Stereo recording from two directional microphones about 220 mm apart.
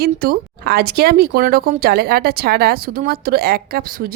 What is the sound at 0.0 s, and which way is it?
Speech, 45° right (ahead or behind).